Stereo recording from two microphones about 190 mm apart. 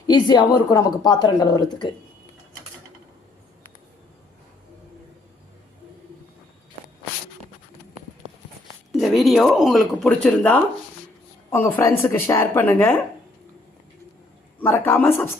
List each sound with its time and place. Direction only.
0.1 s a woman's voice: 20° left (ahead or behind)
9.0 s speech: centre (ahead or behind)
14.6 s speech: 10° left (ahead or behind)